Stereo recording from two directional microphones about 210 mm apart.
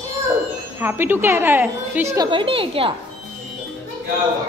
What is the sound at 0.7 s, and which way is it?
A woman's voice, 10° right (ahead or behind).